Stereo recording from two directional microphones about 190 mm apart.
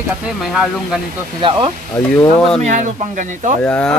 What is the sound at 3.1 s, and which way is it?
Speech, 40° right (ahead or behind).